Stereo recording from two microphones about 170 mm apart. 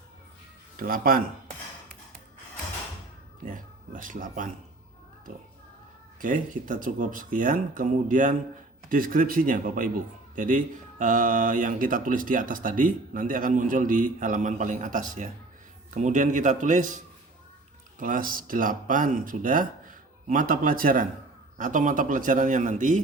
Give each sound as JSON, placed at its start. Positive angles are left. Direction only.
{"t": 0.8, "sound": "speech", "side_deg": -55}
{"t": 3.4, "sound": "speech", "side_deg": -50}
{"t": 6.1, "sound": "speech", "side_deg": -50}
{"t": 18.0, "sound": "speech", "side_deg": -55}